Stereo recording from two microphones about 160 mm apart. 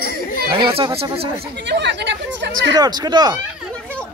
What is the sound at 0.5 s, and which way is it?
Speech, 30° right (ahead or behind).